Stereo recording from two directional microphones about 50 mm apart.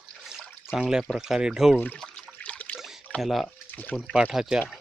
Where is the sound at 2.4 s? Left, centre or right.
Left.